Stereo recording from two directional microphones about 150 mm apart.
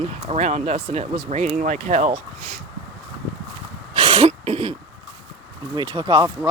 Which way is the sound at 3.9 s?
40° right (ahead or behind).